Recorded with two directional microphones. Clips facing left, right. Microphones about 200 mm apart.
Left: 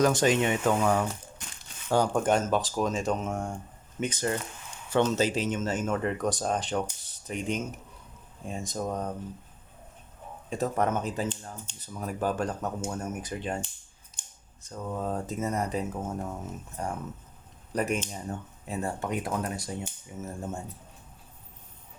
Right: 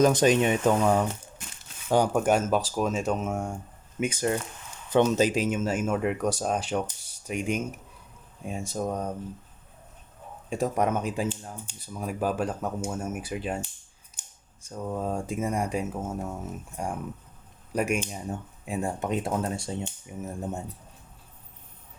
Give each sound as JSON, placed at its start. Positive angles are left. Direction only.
{"t": 0.0, "sound": "speech", "side_deg": -20}
{"t": 10.5, "sound": "speech", "side_deg": -10}